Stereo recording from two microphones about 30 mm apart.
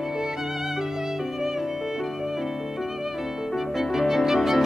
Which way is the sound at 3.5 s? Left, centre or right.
Centre.